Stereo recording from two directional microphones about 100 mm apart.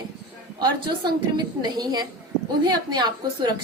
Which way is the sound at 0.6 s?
45° right (ahead or behind).